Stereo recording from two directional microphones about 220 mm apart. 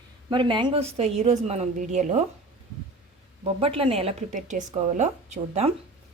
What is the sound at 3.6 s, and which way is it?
A woman's voice, 25° right (ahead or behind).